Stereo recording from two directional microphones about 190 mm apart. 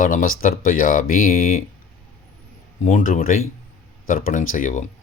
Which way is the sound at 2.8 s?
45° left (ahead or behind).